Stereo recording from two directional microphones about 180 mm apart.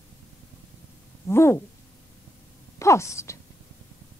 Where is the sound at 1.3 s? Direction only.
15° left (ahead or behind).